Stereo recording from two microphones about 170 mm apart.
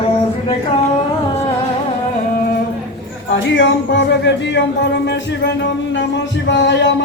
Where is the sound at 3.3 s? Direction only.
90° left.